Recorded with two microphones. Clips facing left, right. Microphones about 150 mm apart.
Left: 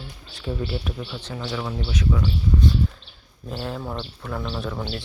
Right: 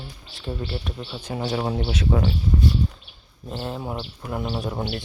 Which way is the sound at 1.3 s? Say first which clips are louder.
Right 5 dB; 40° right (ahead or behind).